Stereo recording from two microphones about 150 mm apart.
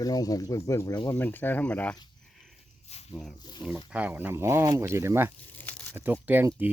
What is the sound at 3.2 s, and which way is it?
Speech, centre (ahead or behind).